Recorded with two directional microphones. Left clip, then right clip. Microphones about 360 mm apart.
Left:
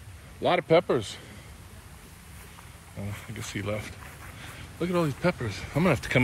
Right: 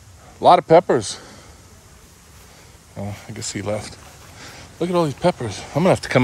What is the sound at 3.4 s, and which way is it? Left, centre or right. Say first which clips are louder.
Speech: right 8 dB; centre.